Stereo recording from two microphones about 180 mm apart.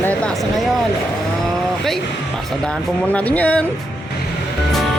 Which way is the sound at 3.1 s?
10° left (ahead or behind).